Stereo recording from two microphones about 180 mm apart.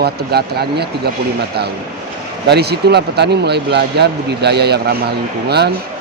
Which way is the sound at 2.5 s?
65° right (ahead or behind).